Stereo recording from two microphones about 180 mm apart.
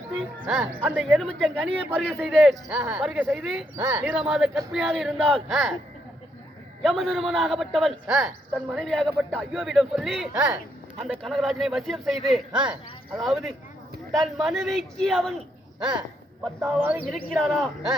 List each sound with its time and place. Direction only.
0.4 s a man's voice: 5° right (ahead or behind)
6.8 s a man's voice: centre (ahead or behind)
15.8 s speech: 25° right (ahead or behind)
16.7 s a man's voice: 5° right (ahead or behind)